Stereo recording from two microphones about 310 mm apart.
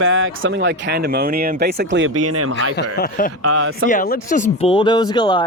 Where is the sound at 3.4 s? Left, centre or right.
Right.